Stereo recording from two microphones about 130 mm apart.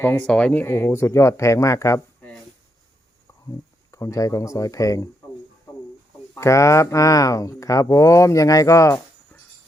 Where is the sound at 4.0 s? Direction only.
25° left (ahead or behind).